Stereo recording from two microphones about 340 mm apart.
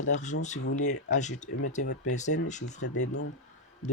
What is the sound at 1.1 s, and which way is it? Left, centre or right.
Speech, left.